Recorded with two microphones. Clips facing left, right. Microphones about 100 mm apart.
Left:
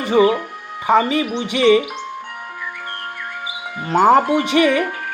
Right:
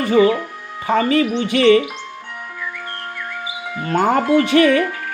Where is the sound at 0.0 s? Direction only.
20° left (ahead or behind).